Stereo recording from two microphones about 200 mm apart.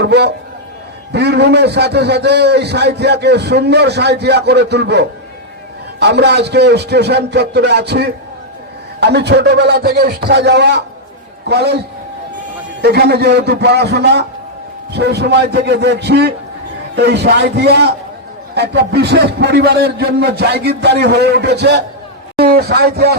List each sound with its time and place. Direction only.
0.0 s a man's voice: 55° right (ahead or behind)
12.8 s a man's voice: 55° right (ahead or behind)